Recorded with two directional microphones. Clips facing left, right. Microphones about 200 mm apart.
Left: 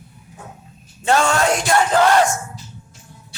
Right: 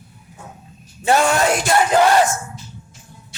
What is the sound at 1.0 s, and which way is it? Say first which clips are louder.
Music: right 1 dB; 15° right (ahead or behind).